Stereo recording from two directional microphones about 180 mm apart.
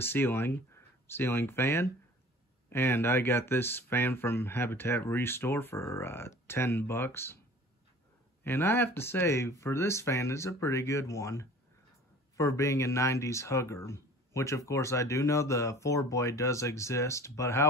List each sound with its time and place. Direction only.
0.0 s speech: 10° left (ahead or behind)
8.5 s speech: 15° left (ahead or behind)